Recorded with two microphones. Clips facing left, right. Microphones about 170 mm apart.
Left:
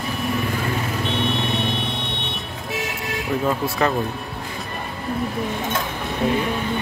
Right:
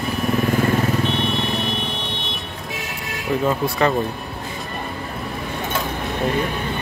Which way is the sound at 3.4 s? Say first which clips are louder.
Right 2 dB; centre (ahead or behind).